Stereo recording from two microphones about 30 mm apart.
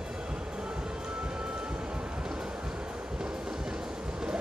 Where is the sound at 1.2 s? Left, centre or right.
Right.